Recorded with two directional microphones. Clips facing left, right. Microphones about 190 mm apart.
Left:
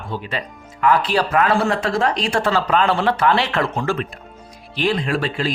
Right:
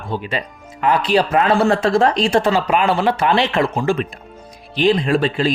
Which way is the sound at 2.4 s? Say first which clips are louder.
Left 1 dB; 15° right (ahead or behind).